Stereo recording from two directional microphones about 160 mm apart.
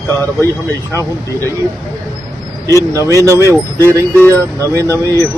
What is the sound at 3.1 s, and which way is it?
Speech, 20° right (ahead or behind).